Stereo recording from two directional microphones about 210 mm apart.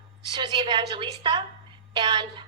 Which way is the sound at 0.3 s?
20° right (ahead or behind).